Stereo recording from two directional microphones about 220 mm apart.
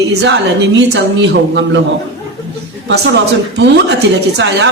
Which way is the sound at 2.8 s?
50° right (ahead or behind).